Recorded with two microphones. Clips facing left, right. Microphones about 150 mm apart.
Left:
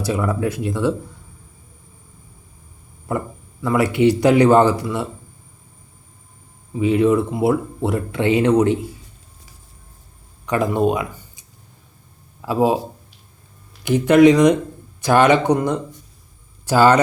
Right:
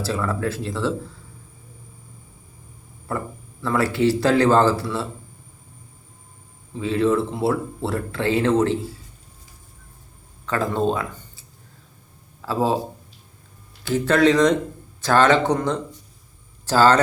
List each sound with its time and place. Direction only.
0.0 s speech: 15° left (ahead or behind)
3.1 s speech: 15° left (ahead or behind)
6.7 s speech: 15° left (ahead or behind)
10.4 s speech: 15° left (ahead or behind)
13.8 s speech: 15° left (ahead or behind)